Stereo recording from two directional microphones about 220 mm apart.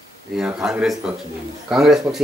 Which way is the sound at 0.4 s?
5° right (ahead or behind).